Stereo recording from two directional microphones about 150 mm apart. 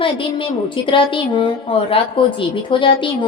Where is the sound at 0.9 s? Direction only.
35° left (ahead or behind).